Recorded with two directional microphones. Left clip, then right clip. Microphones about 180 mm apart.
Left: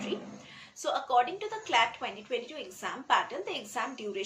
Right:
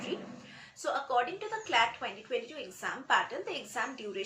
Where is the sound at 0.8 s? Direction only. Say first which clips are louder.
Left 3 dB; 15° left (ahead or behind).